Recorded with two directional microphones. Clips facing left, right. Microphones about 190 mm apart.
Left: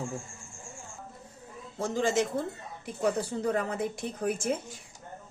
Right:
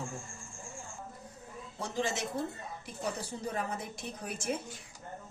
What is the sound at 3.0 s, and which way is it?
A woman's voice, 60° left (ahead or behind).